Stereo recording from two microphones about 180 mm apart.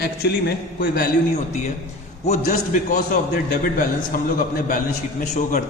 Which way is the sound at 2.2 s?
40° left (ahead or behind).